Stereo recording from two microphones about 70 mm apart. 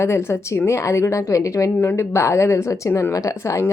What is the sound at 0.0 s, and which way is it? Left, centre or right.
Speech, left.